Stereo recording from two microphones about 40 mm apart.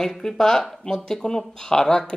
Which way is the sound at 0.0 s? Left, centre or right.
Centre.